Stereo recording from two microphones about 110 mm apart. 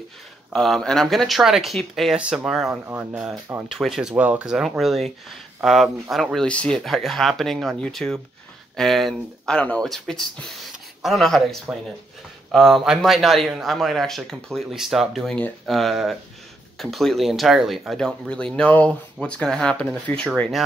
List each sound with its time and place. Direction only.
0.5 s speech: 5° left (ahead or behind)
2.7 s speech: 20° right (ahead or behind)
3.6 s speech: 5° right (ahead or behind)